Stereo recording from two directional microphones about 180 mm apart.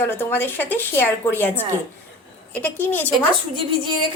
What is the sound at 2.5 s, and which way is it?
Speech, 10° left (ahead or behind).